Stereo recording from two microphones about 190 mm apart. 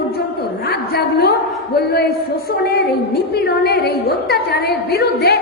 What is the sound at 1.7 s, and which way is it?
A woman's voice, 55° left (ahead or behind).